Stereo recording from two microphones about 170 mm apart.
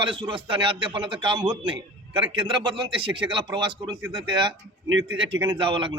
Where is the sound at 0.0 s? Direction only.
30° right (ahead or behind).